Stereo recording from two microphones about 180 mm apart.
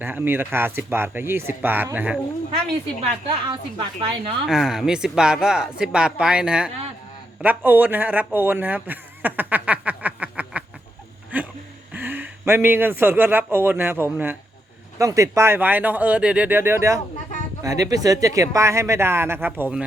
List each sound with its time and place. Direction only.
0.0 s speech: 10° right (ahead or behind)
3.5 s a woman's voice: 25° right (ahead or behind)
4.4 s a man's voice: centre (ahead or behind)
11.3 s a sound: 10° right (ahead or behind)
11.9 s speech: 10° right (ahead or behind)